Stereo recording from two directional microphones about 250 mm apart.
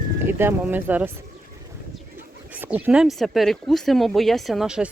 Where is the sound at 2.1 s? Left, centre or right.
Centre.